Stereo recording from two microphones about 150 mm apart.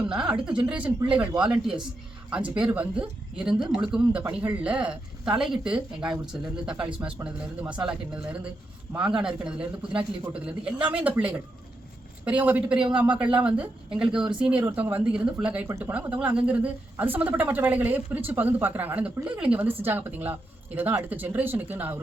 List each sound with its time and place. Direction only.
0.1 s speech: 5° right (ahead or behind)
7.2 s speech: 15° right (ahead or behind)